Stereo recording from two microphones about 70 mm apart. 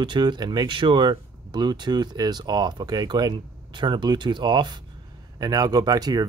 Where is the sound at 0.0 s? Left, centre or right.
Right.